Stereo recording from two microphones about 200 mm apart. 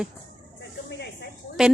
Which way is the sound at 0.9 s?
55° left (ahead or behind).